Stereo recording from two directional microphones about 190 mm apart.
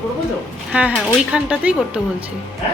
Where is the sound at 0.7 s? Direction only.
5° right (ahead or behind).